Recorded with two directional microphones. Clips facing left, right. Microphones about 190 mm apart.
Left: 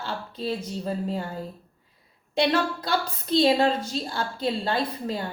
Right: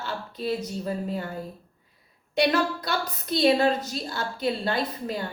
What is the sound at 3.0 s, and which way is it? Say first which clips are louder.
A woman's voice: even; 30° left (ahead or behind).